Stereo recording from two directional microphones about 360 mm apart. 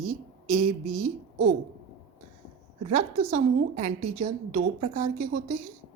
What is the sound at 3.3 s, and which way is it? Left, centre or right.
A woman's voice, centre.